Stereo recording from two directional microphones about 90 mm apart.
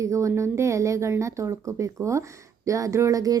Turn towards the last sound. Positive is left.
turn(degrees=-40)  # may be behind; listen again after turning